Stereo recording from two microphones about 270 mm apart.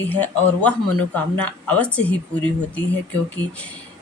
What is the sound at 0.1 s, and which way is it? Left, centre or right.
A woman's voice, centre.